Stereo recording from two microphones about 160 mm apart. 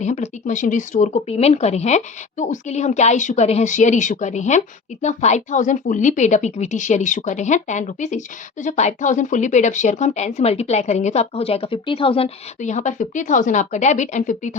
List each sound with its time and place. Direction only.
0.0 s a woman's voice: 45° left (ahead or behind)
12.5 s a woman's voice: 45° left (ahead or behind)